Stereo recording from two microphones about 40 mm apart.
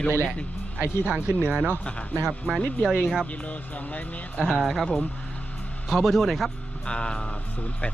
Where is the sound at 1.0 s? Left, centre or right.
Right.